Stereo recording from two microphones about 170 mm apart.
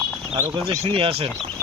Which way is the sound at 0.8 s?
30° right (ahead or behind).